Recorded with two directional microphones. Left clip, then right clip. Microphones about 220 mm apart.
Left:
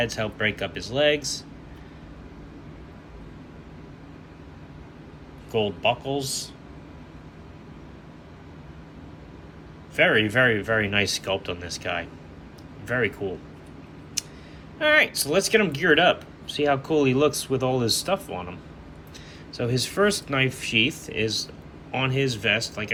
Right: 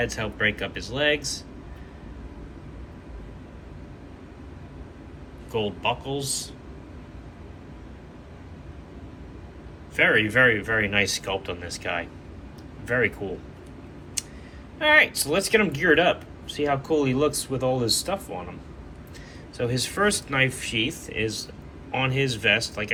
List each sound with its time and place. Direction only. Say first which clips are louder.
0.0 s speech: even; 10° left (ahead or behind)
5.5 s speech: left 3 dB; 10° left (ahead or behind)
9.9 s speech: even; 15° left (ahead or behind)
14.8 s speech: right 1 dB; 15° left (ahead or behind)
19.5 s speech: left 1 dB; 20° left (ahead or behind)